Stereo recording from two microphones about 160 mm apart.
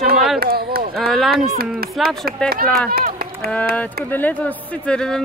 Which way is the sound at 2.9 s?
70° right (ahead or behind).